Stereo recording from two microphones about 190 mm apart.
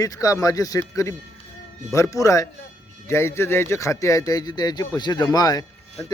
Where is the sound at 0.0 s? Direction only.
20° left (ahead or behind).